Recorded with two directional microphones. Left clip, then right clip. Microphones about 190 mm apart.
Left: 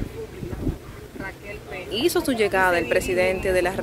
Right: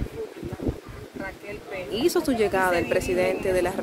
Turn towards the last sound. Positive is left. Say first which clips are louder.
# left 2 dB
turn(degrees=-5)  # may be behind; listen again after turning